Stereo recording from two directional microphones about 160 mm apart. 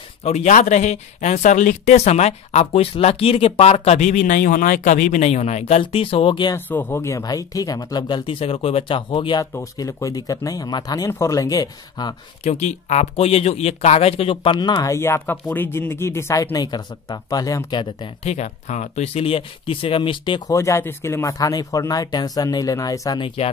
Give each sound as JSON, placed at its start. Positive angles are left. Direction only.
{"t": 0.2, "sound": "speech", "side_deg": 45}
{"t": 6.5, "sound": "speech", "side_deg": 15}
{"t": 9.5, "sound": "speech", "side_deg": 20}
{"t": 12.4, "sound": "speech", "side_deg": 45}
{"t": 18.3, "sound": "speech", "side_deg": 45}
{"t": 23.2, "sound": "speech", "side_deg": 40}